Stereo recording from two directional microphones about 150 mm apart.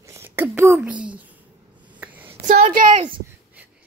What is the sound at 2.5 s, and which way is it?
Speech, 65° right (ahead or behind).